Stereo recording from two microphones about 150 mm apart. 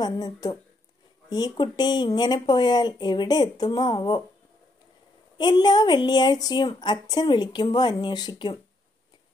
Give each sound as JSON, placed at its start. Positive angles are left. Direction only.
{"t": 0.0, "sound": "a woman's voice", "side_deg": 25}
{"t": 5.4, "sound": "a woman's voice", "side_deg": 30}